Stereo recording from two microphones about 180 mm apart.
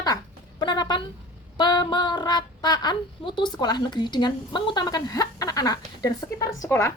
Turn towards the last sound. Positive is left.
turn(degrees=15)  # may be behind; listen again after turning